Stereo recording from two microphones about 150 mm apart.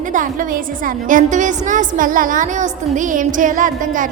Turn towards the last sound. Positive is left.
turn(degrees=-60)  # may be behind; listen again after turning